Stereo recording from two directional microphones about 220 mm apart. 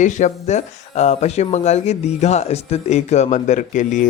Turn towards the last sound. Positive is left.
turn(degrees=35)  # may be behind; listen again after turning